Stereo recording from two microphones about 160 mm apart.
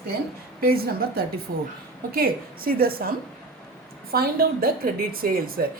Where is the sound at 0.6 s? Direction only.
70° right (ahead or behind).